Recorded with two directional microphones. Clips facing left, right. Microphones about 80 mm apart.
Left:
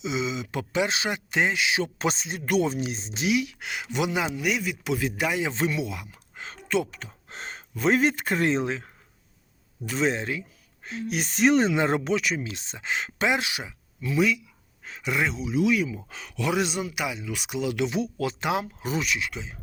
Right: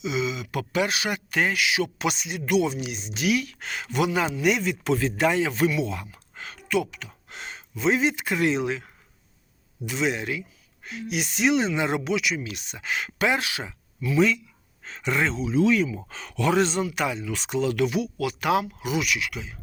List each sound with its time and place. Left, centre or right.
0.0 s speech: left
4.4 s speech: centre
5.5 s speech: left
5.8 s speech: centre
6.5 s speech: left
18.6 s speech: left